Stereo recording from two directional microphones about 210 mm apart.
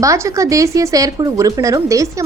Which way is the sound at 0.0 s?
15° right (ahead or behind).